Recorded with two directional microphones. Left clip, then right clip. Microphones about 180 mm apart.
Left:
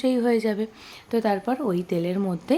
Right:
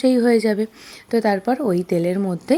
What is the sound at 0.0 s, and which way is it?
A woman's voice, 25° right (ahead or behind).